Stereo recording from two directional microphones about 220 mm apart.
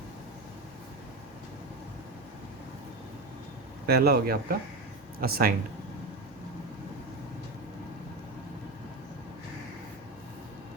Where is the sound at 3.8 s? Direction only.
45° right (ahead or behind).